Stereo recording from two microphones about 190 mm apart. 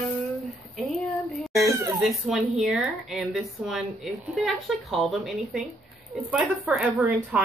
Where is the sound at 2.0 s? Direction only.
Centre (ahead or behind).